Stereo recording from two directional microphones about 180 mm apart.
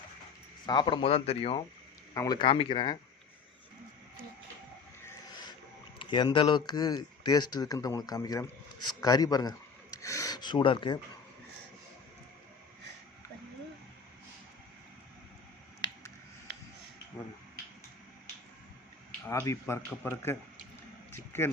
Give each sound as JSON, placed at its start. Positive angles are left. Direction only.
{"t": 0.6, "sound": "speech", "side_deg": 25}
{"t": 2.1, "sound": "speech", "side_deg": 20}
{"t": 5.0, "sound": "a sound", "side_deg": 25}
{"t": 6.0, "sound": "speech", "side_deg": 25}
{"t": 19.3, "sound": "speech", "side_deg": 15}
{"t": 21.1, "sound": "a sound", "side_deg": 15}